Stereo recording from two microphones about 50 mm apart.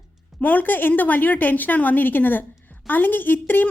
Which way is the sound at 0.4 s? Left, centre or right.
Left.